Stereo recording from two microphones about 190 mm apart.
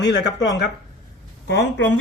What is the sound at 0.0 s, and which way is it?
Speech, 65° left (ahead or behind).